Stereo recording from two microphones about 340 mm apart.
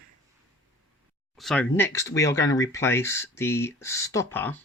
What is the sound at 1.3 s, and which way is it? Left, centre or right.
Speech, centre.